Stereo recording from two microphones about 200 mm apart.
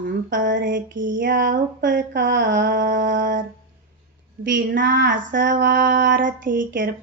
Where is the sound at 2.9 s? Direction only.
40° right (ahead or behind).